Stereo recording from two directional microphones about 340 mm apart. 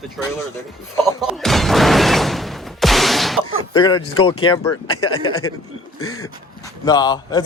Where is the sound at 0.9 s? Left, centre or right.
Centre.